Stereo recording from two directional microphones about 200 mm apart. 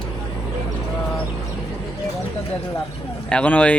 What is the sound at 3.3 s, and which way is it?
Speech, 5° left (ahead or behind).